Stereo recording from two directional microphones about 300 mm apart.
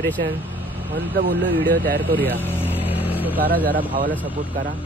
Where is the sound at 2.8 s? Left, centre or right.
Centre.